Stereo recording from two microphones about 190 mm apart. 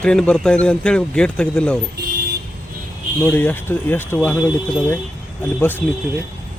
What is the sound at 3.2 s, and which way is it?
Speech, 10° left (ahead or behind).